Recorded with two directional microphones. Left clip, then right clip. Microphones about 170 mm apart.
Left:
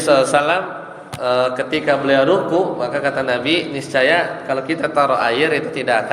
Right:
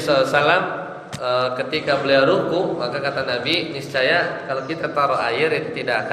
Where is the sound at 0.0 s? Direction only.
35° left (ahead or behind).